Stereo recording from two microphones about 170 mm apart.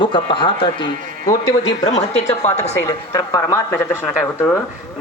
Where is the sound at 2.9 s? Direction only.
20° left (ahead or behind).